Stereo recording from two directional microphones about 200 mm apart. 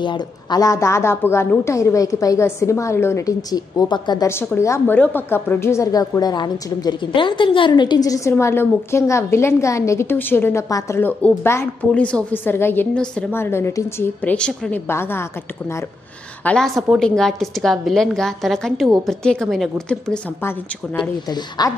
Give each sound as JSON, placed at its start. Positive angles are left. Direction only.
{"t": 0.0, "sound": "a woman's voice", "side_deg": 20}
{"t": 16.4, "sound": "a woman's voice", "side_deg": 0}
{"t": 21.3, "sound": "a woman's voice", "side_deg": 20}